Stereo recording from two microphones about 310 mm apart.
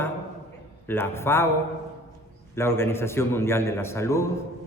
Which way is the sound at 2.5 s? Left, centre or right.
Centre.